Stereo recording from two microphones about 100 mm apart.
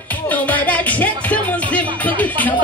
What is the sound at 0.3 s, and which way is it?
Music, 15° left (ahead or behind).